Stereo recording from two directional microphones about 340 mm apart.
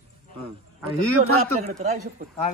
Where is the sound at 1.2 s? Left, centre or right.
Right.